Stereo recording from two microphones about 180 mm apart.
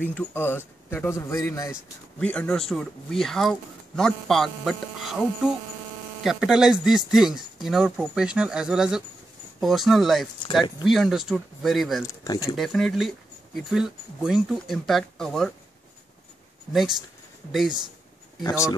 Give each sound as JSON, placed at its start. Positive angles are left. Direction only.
{"t": 0.0, "sound": "speech", "side_deg": 10}
{"t": 2.1, "sound": "speech", "side_deg": 5}
{"t": 12.1, "sound": "speech", "side_deg": 20}
{"t": 12.5, "sound": "speech", "side_deg": 0}
{"t": 17.5, "sound": "speech", "side_deg": 0}
{"t": 18.4, "sound": "speech", "side_deg": 20}